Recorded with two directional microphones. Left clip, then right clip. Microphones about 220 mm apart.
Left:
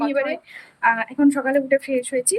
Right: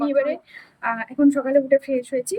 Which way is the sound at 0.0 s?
10° right (ahead or behind).